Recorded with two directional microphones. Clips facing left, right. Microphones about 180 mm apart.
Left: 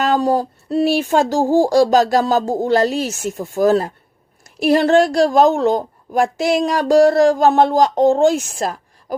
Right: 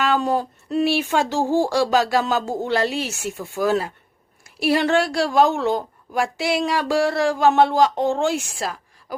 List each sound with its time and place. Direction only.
0.0 s a woman's voice: 40° left (ahead or behind)